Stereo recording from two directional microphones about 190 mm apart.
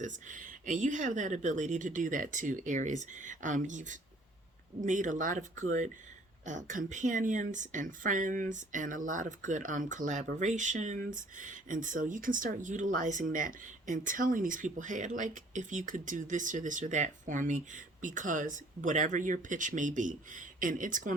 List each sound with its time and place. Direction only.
0.0 s speech: 40° right (ahead or behind)